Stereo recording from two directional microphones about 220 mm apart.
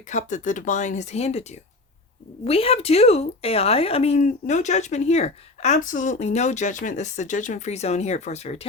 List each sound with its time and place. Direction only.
0.1 s speech: 35° left (ahead or behind)